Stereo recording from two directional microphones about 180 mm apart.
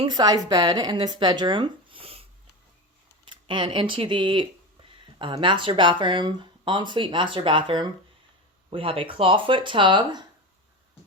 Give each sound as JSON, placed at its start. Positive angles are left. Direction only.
{"t": 0.0, "sound": "speech", "side_deg": -25}
{"t": 3.4, "sound": "speech", "side_deg": -25}